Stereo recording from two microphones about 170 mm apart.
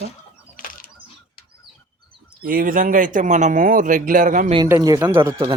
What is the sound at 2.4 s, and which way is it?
Speech, 55° right (ahead or behind).